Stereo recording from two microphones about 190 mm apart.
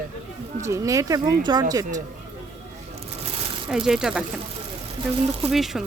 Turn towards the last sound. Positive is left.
turn(degrees=0)  # may be behind; listen again after turning